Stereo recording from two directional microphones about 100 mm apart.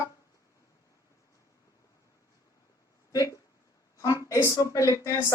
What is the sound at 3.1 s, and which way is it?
Speech, 35° left (ahead or behind).